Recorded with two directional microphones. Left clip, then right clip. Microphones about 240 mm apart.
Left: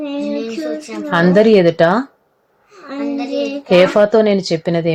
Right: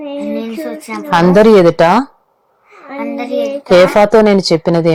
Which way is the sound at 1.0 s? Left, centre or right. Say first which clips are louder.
Right 4 dB; centre.